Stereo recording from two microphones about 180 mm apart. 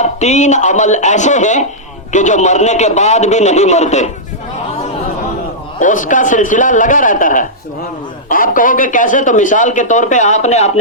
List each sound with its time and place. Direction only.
0.0 s a man's voice: 40° left (ahead or behind)
5.8 s speech: 45° left (ahead or behind)